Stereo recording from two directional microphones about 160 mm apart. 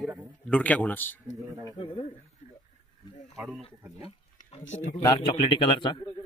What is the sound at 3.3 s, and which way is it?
Speech, centre (ahead or behind).